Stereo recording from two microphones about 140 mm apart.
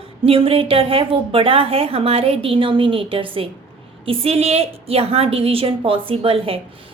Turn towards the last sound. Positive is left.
turn(degrees=-40)  # may be behind; listen again after turning